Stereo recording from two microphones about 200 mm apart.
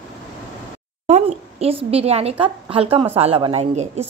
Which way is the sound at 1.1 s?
30° right (ahead or behind).